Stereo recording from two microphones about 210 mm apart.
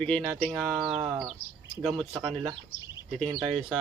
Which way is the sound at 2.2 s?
20° right (ahead or behind).